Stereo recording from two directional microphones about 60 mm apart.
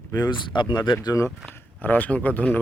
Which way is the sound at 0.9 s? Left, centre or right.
Left.